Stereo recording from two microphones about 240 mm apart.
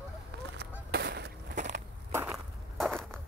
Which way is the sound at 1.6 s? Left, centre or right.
Right.